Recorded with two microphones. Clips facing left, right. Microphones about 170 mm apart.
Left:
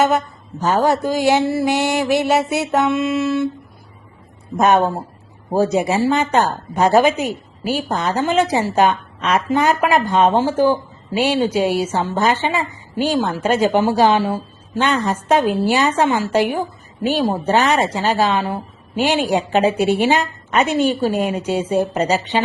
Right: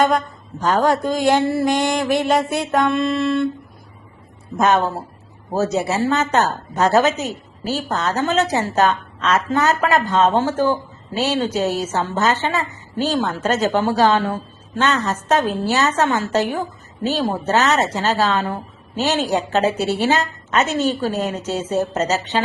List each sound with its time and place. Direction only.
0.6 s speech: 10° left (ahead or behind)
4.5 s speech: 15° left (ahead or behind)